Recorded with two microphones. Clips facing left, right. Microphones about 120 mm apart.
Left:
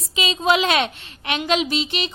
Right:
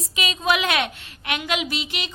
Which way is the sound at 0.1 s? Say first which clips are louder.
Left 4 dB; 25° left (ahead or behind).